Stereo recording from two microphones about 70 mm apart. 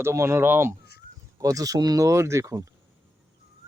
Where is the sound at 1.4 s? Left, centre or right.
Right.